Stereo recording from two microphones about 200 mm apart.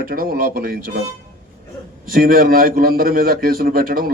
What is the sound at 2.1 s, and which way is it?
A man's voice, 45° right (ahead or behind).